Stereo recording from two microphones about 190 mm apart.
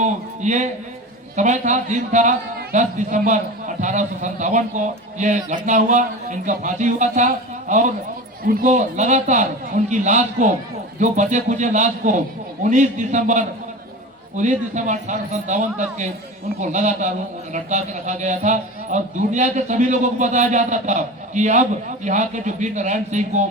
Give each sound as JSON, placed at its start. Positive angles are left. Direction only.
{"t": 0.0, "sound": "a man's voice", "side_deg": -40}